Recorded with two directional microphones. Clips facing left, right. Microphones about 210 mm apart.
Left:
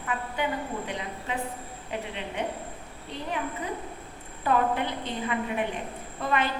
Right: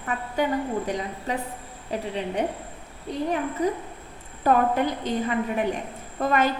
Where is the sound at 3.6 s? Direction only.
40° right (ahead or behind).